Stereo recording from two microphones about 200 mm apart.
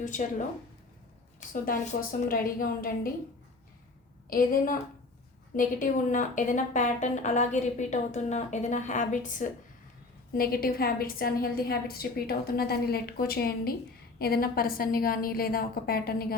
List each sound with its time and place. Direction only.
0.0 s a woman's voice: 40° left (ahead or behind)
4.3 s a woman's voice: 45° left (ahead or behind)